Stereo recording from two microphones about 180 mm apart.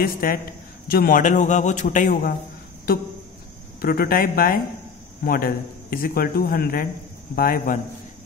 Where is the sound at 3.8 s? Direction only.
55° left (ahead or behind).